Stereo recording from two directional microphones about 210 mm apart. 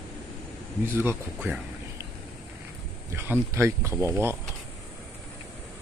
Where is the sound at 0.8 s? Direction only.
10° right (ahead or behind).